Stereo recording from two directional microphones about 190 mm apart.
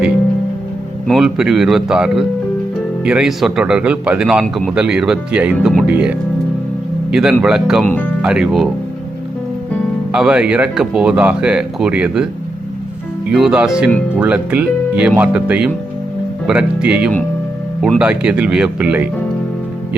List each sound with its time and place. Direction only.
1.0 s a man's voice: centre (ahead or behind)
10.1 s a man's voice: 5° right (ahead or behind)